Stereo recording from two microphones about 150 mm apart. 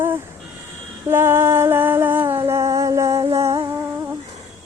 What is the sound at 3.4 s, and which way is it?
Humming, 25° right (ahead or behind).